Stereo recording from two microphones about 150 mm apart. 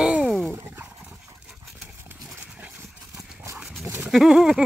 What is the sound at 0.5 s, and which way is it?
Dog, 15° right (ahead or behind).